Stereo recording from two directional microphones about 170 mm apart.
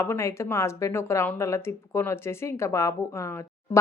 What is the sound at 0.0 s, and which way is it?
Speech, 15° left (ahead or behind).